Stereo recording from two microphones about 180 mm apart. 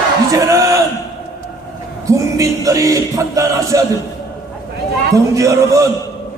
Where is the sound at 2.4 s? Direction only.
20° right (ahead or behind).